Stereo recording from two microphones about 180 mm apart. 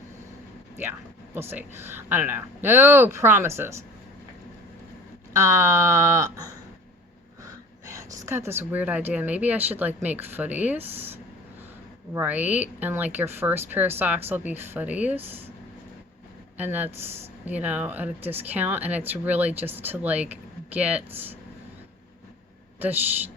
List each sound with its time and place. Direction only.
0.8 s speech: 10° right (ahead or behind)
5.3 s speech: 15° right (ahead or behind)
16.6 s speech: 10° right (ahead or behind)